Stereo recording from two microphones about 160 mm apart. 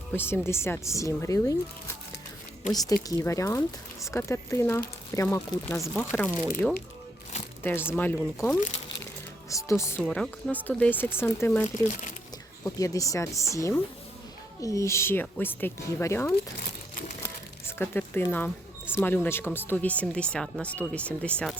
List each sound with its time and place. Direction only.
0.1 s speech: 15° left (ahead or behind)
5.9 s speech: 5° left (ahead or behind)
7.6 s speech: 15° left (ahead or behind)
9.5 s speech: 20° left (ahead or behind)
17.7 s speech: 15° left (ahead or behind)